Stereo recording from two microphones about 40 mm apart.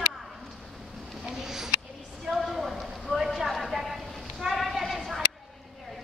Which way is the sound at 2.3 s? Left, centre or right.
Centre.